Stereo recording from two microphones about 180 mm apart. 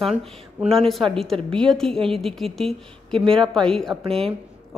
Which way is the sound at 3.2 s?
30° right (ahead or behind).